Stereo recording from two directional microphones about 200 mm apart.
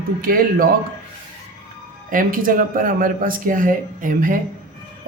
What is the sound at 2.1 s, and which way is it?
Speech, 45° right (ahead or behind).